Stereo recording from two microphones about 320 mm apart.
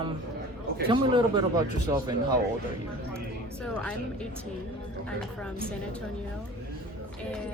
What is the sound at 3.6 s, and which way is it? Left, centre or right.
Speech, centre.